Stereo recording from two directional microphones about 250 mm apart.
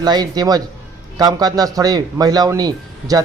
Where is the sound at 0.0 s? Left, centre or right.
Centre.